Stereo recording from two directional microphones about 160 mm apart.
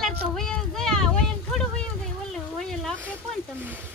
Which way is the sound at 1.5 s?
5° left (ahead or behind).